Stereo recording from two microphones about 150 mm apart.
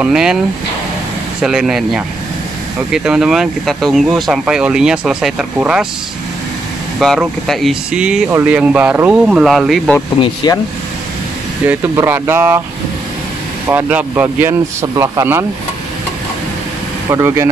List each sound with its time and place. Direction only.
0.0 s speech: 5° right (ahead or behind)
1.4 s speech: 5° right (ahead or behind)
7.0 s speech: centre (ahead or behind)
10.2 s speech: 25° left (ahead or behind)
11.9 s speech: 15° right (ahead or behind)
13.7 s speech: 10° right (ahead or behind)
17.1 s speech: 20° right (ahead or behind)